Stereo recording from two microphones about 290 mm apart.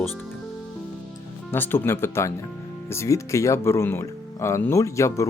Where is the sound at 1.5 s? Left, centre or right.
Centre.